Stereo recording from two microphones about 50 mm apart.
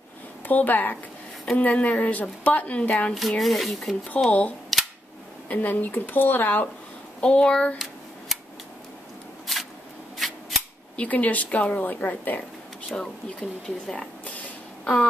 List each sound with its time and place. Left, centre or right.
0.5 s a woman's voice: left
3.2 s rub: centre
4.3 s a woman's voice: left
5.5 s a woman's voice: left
7.2 s a woman's voice: left
8.3 s scissors: centre
9.5 s a sound: centre
10.1 s scissors: centre
11.0 s a woman's voice: left
12.9 s speech: centre